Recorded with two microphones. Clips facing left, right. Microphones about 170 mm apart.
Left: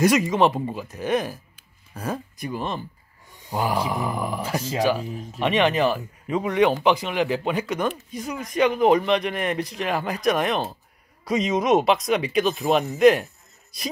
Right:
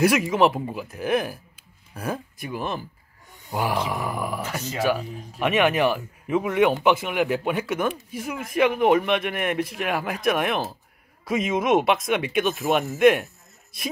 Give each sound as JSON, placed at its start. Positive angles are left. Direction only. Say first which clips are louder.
{"t": 0.0, "sound": "speech", "louder": "left 1 dB", "side_deg": -5}
{"t": 4.4, "sound": "speech", "louder": "left 3 dB", "side_deg": 30}
{"t": 4.8, "sound": "speech", "louder": "left 1 dB", "side_deg": -5}